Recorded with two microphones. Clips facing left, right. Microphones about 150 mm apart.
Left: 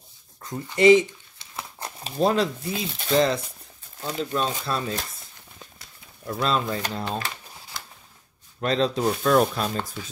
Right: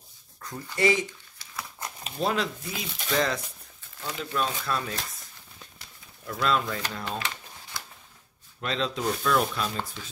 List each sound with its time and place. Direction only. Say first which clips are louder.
0.4 s speech: left 6 dB; 20° left (ahead or behind)
6.2 s speech: left 2 dB; 30° left (ahead or behind)
8.5 s speech: left 7 dB; 40° left (ahead or behind)